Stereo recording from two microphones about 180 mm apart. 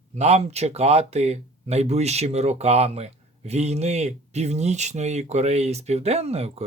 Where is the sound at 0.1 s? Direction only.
40° right (ahead or behind).